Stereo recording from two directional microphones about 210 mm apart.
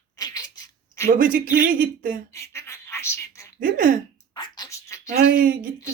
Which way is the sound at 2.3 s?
15° left (ahead or behind).